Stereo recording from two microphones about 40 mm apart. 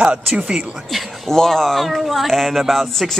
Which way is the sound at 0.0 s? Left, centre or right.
Right.